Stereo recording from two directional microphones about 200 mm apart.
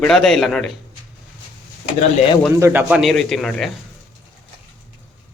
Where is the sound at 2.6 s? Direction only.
10° right (ahead or behind).